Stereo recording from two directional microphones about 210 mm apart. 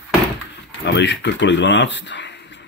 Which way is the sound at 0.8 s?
55° left (ahead or behind).